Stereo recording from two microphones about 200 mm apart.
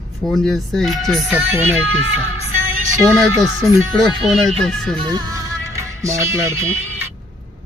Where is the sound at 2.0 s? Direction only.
30° left (ahead or behind).